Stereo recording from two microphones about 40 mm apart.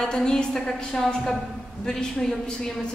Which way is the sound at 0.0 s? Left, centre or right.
Centre.